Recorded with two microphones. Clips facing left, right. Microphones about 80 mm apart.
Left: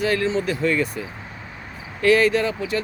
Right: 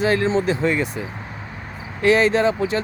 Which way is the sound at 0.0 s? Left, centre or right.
Right.